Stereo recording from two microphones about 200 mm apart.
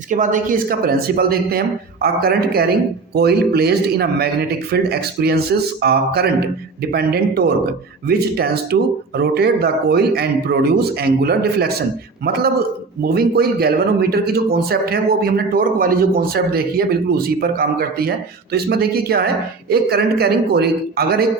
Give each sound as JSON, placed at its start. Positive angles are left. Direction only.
{"t": 0.1, "sound": "a man's voice", "side_deg": -40}